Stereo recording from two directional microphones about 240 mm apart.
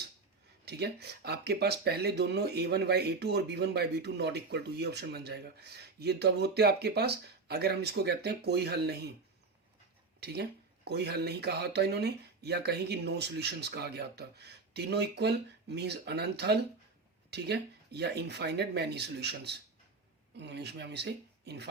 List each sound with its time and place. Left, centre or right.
0.6 s speech: right
10.2 s speech: right